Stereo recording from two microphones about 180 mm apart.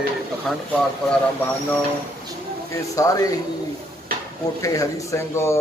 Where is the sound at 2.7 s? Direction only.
20° left (ahead or behind).